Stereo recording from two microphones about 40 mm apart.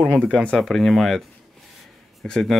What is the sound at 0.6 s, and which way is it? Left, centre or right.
Speech, centre.